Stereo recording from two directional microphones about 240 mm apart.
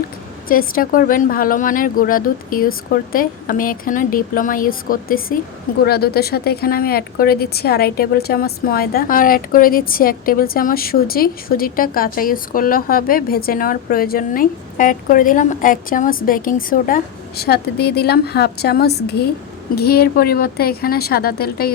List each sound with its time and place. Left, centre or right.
0.4 s a woman's voice: left